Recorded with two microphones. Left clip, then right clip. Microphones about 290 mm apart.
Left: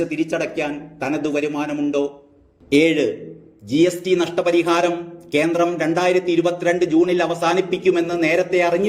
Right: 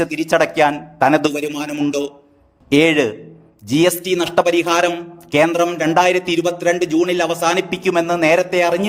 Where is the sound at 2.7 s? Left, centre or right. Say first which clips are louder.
Right 2 dB; right.